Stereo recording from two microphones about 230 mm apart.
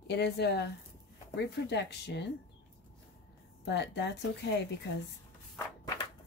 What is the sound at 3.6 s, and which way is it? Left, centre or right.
Speech, left.